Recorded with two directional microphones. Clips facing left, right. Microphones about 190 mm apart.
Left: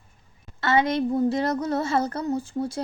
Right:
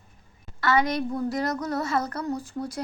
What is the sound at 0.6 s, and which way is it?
A woman's voice, 25° left (ahead or behind).